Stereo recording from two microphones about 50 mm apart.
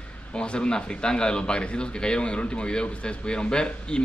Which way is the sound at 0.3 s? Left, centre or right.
Centre.